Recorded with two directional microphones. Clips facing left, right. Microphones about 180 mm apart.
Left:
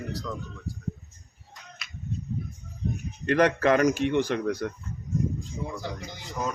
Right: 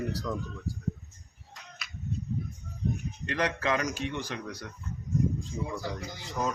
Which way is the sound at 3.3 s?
55° left (ahead or behind).